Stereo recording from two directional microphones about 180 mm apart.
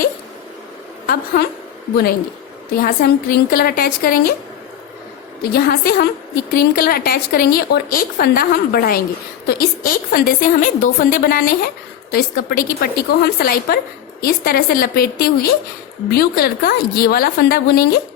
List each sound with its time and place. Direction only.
1.0 s a woman's voice: 55° left (ahead or behind)
2.8 s a woman's voice: 55° left (ahead or behind)
5.4 s a woman's voice: 60° left (ahead or behind)